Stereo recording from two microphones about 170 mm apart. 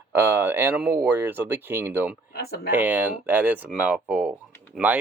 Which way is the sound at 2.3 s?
65° left (ahead or behind).